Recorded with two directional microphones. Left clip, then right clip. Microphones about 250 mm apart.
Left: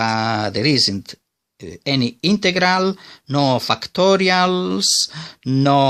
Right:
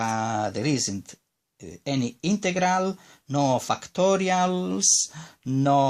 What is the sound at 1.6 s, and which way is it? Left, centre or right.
Speech, left.